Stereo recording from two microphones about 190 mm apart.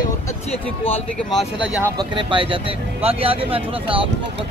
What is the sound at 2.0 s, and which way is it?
Speech, 25° right (ahead or behind).